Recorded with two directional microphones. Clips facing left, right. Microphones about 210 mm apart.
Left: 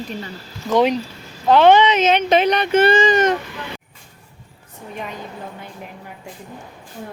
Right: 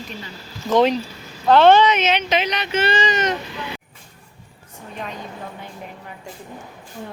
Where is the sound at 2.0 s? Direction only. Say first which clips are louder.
Left 5 dB; 50° left (ahead or behind).